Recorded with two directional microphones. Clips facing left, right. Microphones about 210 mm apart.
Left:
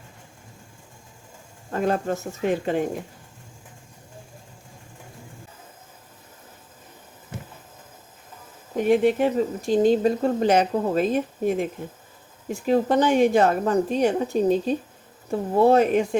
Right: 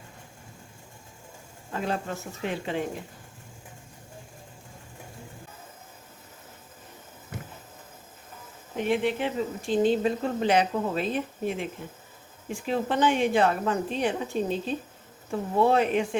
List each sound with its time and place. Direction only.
1.7 s speech: 45° left (ahead or behind)
8.7 s a woman's voice: 45° left (ahead or behind)